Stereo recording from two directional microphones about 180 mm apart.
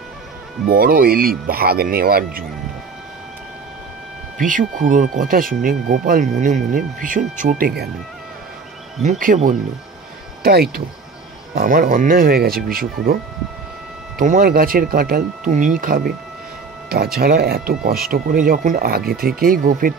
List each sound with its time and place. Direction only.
0.7 s speech: 50° right (ahead or behind)
4.4 s speech: 45° right (ahead or behind)
9.2 s speech: 45° right (ahead or behind)
10.4 s speech: 60° right (ahead or behind)